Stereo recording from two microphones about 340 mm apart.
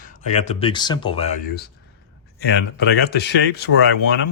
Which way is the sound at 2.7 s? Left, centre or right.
Left.